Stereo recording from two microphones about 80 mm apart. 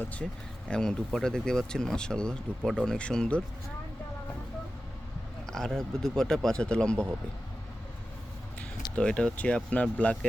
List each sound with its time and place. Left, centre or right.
0.0 s speech: centre
0.7 s speech: centre
5.5 s speech: centre
9.0 s speech: centre